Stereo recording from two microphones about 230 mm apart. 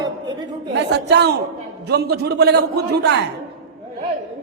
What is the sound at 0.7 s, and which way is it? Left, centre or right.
A woman's voice, right.